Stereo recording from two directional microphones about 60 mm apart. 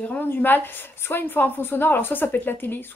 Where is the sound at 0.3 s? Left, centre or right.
Left.